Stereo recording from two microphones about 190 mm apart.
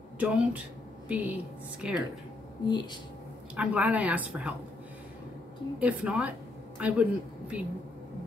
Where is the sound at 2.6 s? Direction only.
25° left (ahead or behind).